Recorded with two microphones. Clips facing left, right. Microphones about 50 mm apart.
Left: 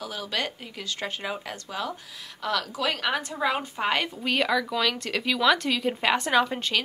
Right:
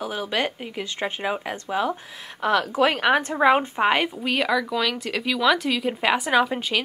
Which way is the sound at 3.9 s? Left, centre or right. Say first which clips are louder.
Right 3 dB; centre.